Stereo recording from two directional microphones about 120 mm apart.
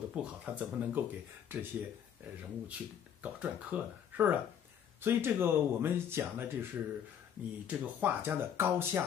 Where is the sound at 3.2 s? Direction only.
10° right (ahead or behind).